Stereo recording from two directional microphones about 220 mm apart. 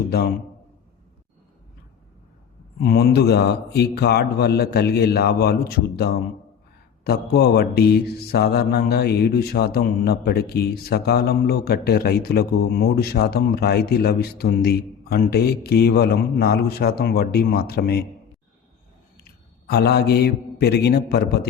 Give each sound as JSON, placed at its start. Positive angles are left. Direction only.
{"t": 2.8, "sound": "mantra", "side_deg": 45}
{"t": 19.1, "sound": "a man's voice", "side_deg": 45}